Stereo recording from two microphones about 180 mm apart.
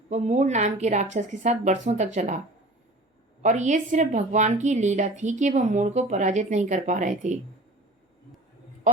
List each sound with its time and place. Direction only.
0.1 s a woman's voice: 40° right (ahead or behind)
3.4 s a woman's voice: 40° right (ahead or behind)